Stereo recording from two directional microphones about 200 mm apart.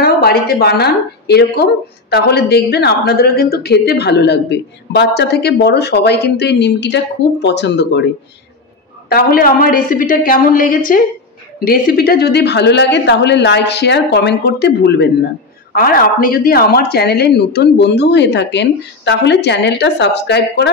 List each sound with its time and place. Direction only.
0.0 s speech: 50° left (ahead or behind)
9.1 s a woman's voice: 45° left (ahead or behind)
15.7 s speech: 45° left (ahead or behind)